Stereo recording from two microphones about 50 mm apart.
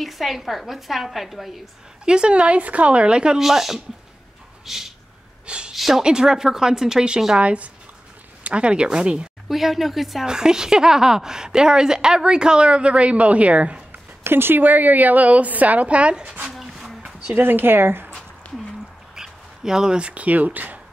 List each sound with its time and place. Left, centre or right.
0.0 s a woman's voice: centre
2.0 s a woman's voice: centre
3.3 s a woman's voice: centre
4.6 s a sound: centre
6.0 s a woman's voice: centre
7.4 s a woman's voice: right
9.5 s a woman's voice: centre
10.2 s a woman's voice: centre
14.2 s a woman's voice: right
16.5 s a sound: centre
17.3 s speech: right
18.4 s a sound: left
19.1 s speech: centre; by 20.8 s right